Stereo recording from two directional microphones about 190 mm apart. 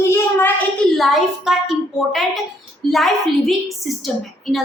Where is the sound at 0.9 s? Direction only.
Centre (ahead or behind).